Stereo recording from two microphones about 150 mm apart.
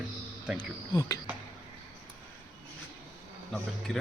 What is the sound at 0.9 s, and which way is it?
Speech, 25° left (ahead or behind).